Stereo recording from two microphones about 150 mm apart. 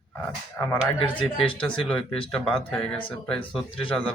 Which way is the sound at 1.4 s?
5° left (ahead or behind).